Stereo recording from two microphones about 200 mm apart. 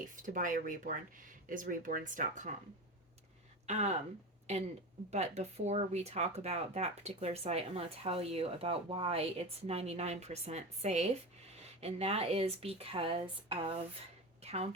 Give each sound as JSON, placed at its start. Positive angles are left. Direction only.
{"t": 0.2, "sound": "speech", "side_deg": -40}
{"t": 3.7, "sound": "speech", "side_deg": -35}
{"t": 5.1, "sound": "speech", "side_deg": -35}
{"t": 14.4, "sound": "whispering", "side_deg": -30}